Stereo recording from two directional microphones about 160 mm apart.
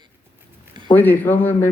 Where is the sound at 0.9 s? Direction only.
10° left (ahead or behind).